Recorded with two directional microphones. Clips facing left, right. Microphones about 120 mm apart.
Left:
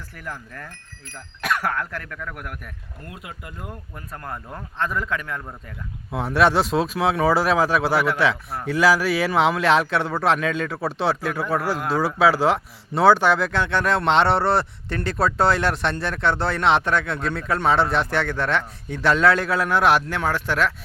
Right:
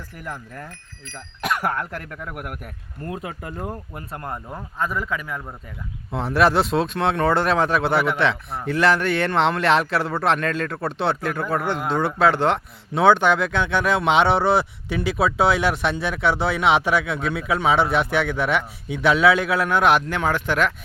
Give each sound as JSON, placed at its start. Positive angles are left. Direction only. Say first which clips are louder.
{"t": 0.3, "sound": "speech", "louder": "right 1 dB", "side_deg": -20}
{"t": 3.1, "sound": "speech", "louder": "right 8 dB", "side_deg": -35}